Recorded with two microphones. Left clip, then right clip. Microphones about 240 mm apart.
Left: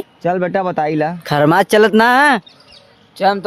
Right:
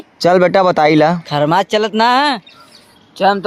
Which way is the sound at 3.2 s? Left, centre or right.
Centre.